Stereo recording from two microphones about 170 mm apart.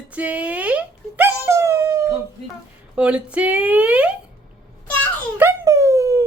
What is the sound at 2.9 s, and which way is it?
Speech, 5° right (ahead or behind).